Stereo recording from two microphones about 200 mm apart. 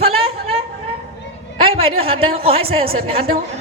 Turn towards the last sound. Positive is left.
turn(degrees=-30)  # may be behind; listen again after turning